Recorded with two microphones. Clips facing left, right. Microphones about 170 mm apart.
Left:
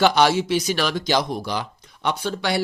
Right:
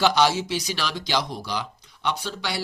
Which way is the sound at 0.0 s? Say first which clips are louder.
Left 3 dB; 55° left (ahead or behind).